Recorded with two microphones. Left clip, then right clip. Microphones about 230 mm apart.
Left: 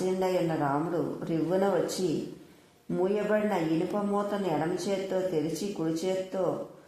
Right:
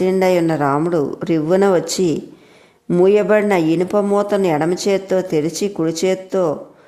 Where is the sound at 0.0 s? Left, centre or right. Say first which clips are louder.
Right 13 dB; right.